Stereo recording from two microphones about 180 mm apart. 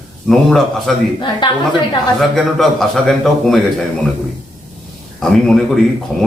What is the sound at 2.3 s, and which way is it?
Speech, centre (ahead or behind).